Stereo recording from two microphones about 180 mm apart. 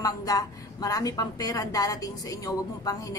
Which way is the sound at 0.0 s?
20° left (ahead or behind).